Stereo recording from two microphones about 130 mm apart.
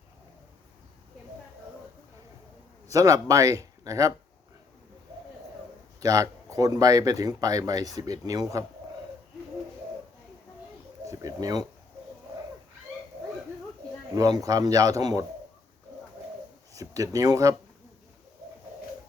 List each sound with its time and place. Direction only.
2.9 s speech: 25° right (ahead or behind)
6.0 s speech: 25° right (ahead or behind)
11.0 s speech: 25° right (ahead or behind)
14.1 s speech: 25° right (ahead or behind)
16.7 s speech: 25° right (ahead or behind)